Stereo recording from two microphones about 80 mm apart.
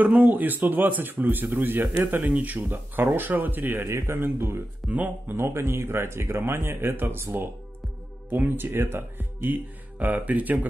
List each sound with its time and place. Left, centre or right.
0.0 s speech: right
4.8 s speech: centre
5.3 s speech: right
8.5 s speech: right